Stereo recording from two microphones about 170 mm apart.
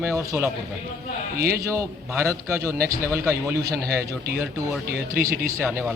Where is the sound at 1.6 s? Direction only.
20° right (ahead or behind).